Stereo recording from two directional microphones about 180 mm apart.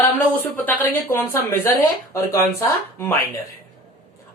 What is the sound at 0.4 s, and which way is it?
A man's voice, 10° left (ahead or behind).